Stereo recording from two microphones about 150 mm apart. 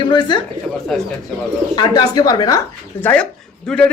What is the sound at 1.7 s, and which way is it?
Speech, 30° left (ahead or behind).